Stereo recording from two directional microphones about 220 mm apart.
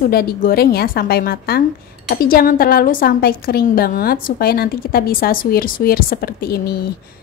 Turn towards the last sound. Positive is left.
turn(degrees=45)  # may be behind; listen again after turning